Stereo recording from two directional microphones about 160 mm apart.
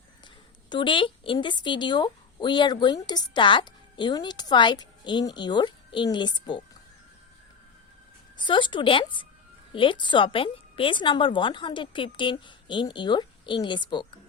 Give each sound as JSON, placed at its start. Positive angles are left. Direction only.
{"t": 0.7, "sound": "a woman's voice", "side_deg": 30}
{"t": 8.4, "sound": "a woman's voice", "side_deg": 30}